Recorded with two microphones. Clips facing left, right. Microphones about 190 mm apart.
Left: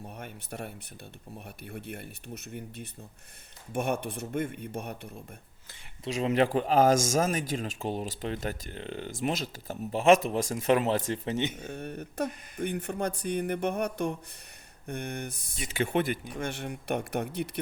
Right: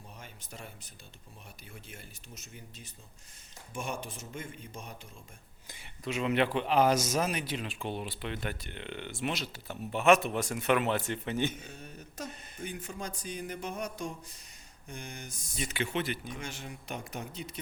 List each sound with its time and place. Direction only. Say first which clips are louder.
0.0 s speech: left 8 dB; 60° left (ahead or behind)
6.1 s speech: left 3 dB; 35° left (ahead or behind)
11.6 s speech: left 10 dB; 60° left (ahead or behind)